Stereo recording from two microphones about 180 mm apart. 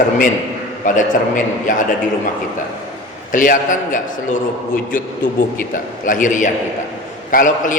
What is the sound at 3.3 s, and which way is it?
A man's voice, 45° left (ahead or behind).